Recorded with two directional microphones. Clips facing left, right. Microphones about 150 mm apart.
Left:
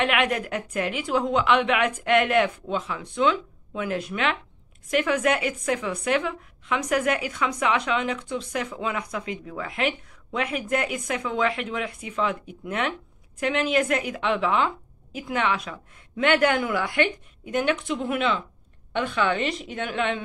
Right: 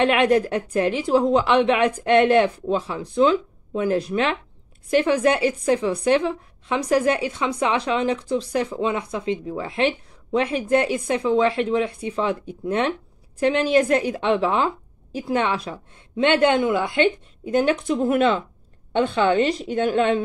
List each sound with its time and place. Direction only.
0.0 s a woman's voice: 30° right (ahead or behind)
18.9 s a woman's voice: 30° right (ahead or behind)